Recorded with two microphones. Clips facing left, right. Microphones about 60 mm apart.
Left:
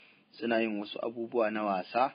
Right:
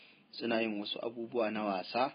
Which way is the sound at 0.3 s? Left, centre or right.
Centre.